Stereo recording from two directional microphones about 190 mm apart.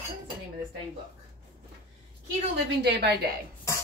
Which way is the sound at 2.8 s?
60° right (ahead or behind).